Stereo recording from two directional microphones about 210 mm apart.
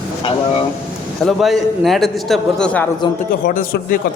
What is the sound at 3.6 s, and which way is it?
Speech, 45° left (ahead or behind).